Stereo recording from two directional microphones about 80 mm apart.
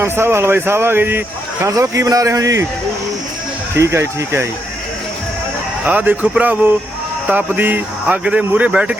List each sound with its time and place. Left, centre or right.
0.0 s speech: right
1.6 s a man's voice: right
3.8 s speech: right
5.8 s speech: centre